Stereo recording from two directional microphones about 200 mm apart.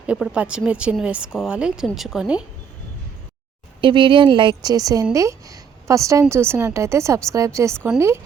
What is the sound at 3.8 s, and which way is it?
A woman's voice, 25° right (ahead or behind).